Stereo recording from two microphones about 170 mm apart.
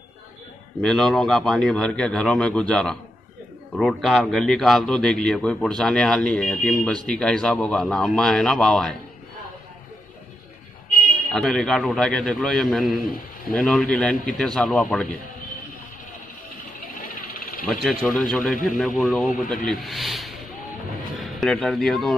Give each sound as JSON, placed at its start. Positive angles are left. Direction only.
{"t": 0.8, "sound": "speech", "side_deg": 0}
{"t": 11.3, "sound": "speech", "side_deg": 5}
{"t": 13.0, "sound": "a man's voice", "side_deg": 55}
{"t": 13.6, "sound": "speech", "side_deg": 0}
{"t": 16.9, "sound": "vehicle", "side_deg": 55}
{"t": 17.8, "sound": "speech", "side_deg": 5}